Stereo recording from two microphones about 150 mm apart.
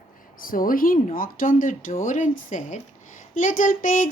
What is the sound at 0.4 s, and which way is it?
Speech, 70° left (ahead or behind).